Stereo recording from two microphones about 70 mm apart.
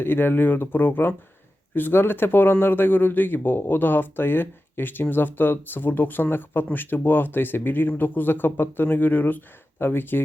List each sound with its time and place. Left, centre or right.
0.0 s speech: left